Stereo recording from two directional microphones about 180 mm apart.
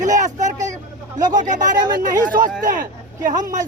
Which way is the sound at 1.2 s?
45° right (ahead or behind).